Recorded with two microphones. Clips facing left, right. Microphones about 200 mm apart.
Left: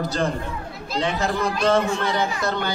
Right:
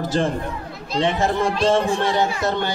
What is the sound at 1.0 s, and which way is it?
A man's voice, 25° right (ahead or behind).